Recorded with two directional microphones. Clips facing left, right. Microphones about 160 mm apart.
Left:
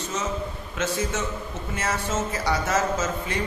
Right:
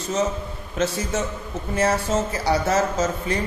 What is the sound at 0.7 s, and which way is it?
Speech, 35° right (ahead or behind).